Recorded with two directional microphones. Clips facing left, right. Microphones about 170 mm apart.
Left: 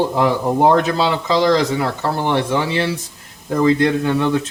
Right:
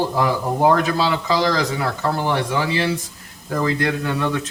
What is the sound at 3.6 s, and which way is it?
Speech, 25° left (ahead or behind).